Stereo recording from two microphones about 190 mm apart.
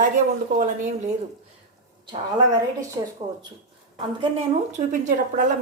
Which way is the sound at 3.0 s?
20° right (ahead or behind).